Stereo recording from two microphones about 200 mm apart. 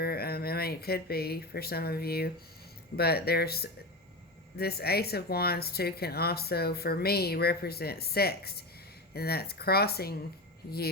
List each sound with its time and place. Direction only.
0.0 s speech: 50° left (ahead or behind)